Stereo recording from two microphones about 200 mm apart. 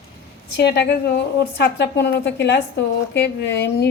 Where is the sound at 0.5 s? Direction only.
55° left (ahead or behind).